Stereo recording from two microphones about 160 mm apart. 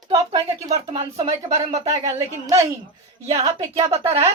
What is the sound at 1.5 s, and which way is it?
Speech, 20° right (ahead or behind).